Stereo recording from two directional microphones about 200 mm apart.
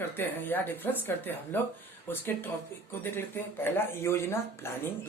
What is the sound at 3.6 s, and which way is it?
Speech, 10° left (ahead or behind).